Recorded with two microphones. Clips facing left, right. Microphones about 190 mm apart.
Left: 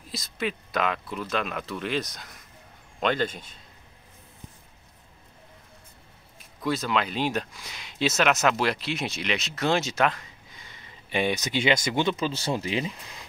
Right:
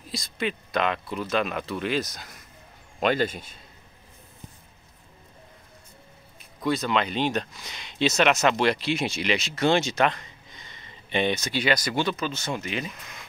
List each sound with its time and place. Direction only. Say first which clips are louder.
0.1 s a man's voice: right 1 dB; 5° left (ahead or behind)
6.6 s speech: right 2 dB; 5° left (ahead or behind); by 12.3 s 20° left (ahead or behind)
12.3 s speech: left 3 dB; 35° left (ahead or behind)